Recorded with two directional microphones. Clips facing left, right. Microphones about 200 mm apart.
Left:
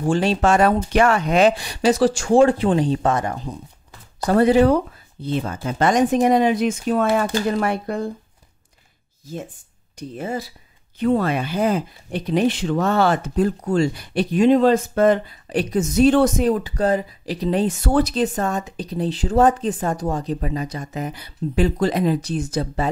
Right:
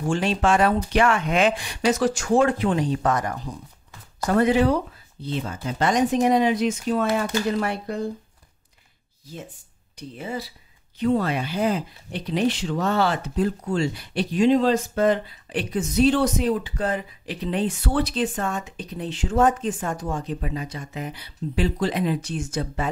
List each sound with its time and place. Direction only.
0.0 s speech: 35° left (ahead or behind)
5.2 s speech: 50° left (ahead or behind)
9.9 s speech: 45° left (ahead or behind)